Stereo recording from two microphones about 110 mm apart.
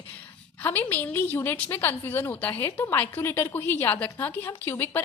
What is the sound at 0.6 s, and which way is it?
A woman's voice, 20° left (ahead or behind).